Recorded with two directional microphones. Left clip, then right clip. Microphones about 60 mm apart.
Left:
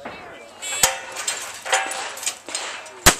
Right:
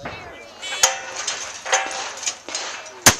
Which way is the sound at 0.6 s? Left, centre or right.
Right.